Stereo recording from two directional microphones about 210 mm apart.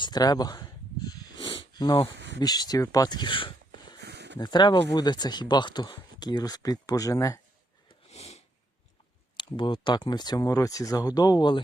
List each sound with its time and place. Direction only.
0.0 s a sound: 20° left (ahead or behind)
2.1 s speech: 55° right (ahead or behind)
2.4 s speech: 20° left (ahead or behind)
4.0 s a sound: 55° right (ahead or behind)
4.4 s speech: 20° left (ahead or behind)
8.0 s sniff: 30° left (ahead or behind)
9.4 s speech: 25° left (ahead or behind)